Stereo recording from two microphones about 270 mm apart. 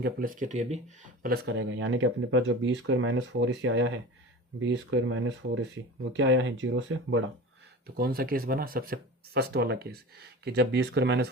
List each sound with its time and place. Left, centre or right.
0.0 s speech: right
1.2 s speech: right
7.9 s speech: right